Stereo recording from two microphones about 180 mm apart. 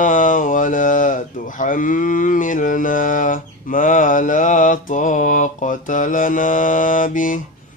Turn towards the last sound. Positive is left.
turn(degrees=45)  # may be behind; listen again after turning